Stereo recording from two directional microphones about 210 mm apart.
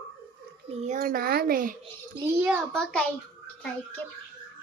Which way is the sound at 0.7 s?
35° right (ahead or behind).